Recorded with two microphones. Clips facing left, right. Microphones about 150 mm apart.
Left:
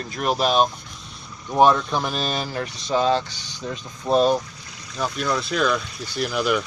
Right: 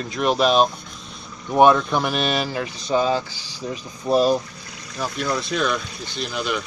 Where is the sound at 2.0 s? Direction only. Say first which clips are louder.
Right 3 dB; 65° right (ahead or behind).